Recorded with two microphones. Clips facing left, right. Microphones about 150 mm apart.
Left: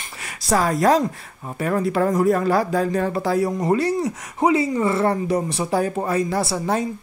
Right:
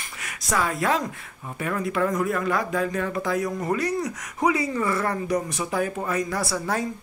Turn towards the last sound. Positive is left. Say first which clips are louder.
# left 4 dB
turn(degrees=25)  # may be behind; listen again after turning